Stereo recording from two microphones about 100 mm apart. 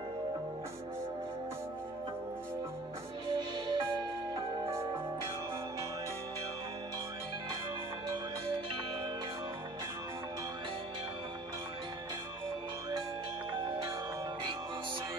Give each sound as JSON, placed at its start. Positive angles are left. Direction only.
{"t": 3.3, "sound": "music", "side_deg": -50}